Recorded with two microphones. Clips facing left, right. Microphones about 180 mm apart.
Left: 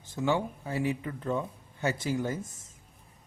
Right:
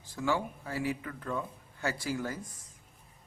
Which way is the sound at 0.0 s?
20° left (ahead or behind).